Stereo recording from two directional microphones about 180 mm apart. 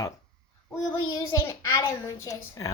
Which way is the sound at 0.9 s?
15° left (ahead or behind).